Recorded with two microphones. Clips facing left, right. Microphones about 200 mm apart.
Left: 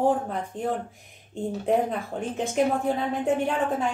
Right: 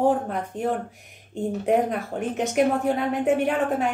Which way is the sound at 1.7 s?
60° right (ahead or behind).